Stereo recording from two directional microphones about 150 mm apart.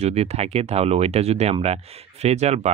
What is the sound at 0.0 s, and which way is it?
Speech, 45° right (ahead or behind).